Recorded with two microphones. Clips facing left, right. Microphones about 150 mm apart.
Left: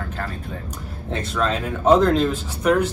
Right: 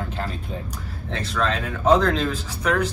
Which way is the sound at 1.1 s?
5° left (ahead or behind).